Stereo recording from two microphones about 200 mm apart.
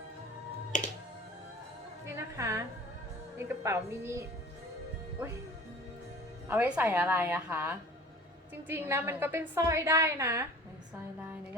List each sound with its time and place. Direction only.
0.7 s music: 40° left (ahead or behind)
2.1 s a sound: 15° right (ahead or behind)
3.3 s a woman's voice: 15° right (ahead or behind)
6.5 s a woman's voice: 10° right (ahead or behind)